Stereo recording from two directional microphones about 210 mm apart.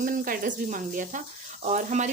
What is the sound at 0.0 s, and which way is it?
Speech, 40° right (ahead or behind).